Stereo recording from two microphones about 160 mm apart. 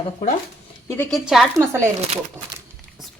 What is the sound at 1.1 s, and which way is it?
Speech, centre (ahead or behind).